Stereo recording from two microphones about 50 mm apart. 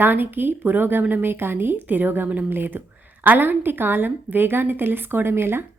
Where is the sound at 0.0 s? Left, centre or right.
Right.